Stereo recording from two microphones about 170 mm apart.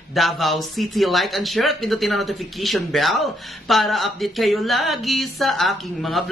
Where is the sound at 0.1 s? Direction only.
Centre (ahead or behind).